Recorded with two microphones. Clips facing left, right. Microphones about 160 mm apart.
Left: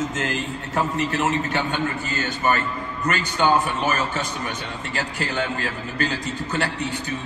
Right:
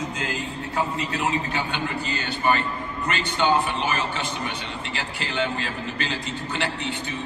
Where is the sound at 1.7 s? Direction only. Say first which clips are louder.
Left 2 dB; 45° left (ahead or behind).